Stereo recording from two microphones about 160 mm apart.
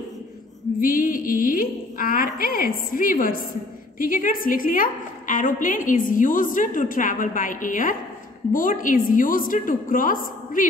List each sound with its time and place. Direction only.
0.7 s a woman's voice: 60° left (ahead or behind)